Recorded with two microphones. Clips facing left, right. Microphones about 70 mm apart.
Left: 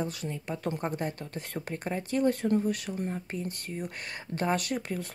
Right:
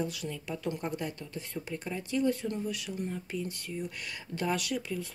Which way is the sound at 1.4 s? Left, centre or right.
Left.